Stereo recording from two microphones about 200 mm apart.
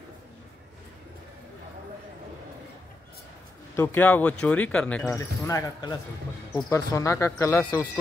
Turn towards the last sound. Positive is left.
turn(degrees=15)  # may be behind; listen again after turning